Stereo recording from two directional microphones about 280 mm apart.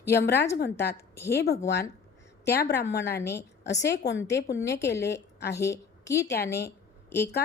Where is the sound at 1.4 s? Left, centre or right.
Left.